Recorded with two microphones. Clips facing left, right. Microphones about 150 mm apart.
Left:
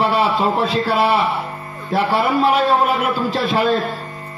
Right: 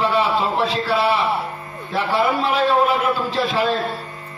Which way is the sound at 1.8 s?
40° left (ahead or behind).